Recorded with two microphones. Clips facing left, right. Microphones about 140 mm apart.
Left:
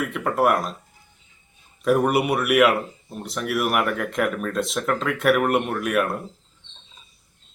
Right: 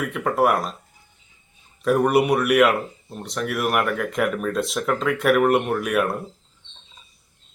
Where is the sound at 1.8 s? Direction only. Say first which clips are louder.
Right 1 dB; centre (ahead or behind).